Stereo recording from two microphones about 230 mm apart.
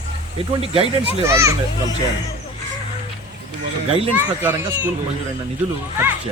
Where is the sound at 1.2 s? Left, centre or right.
Centre.